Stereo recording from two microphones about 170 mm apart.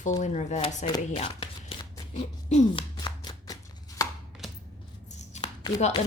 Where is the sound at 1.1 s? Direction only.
35° left (ahead or behind).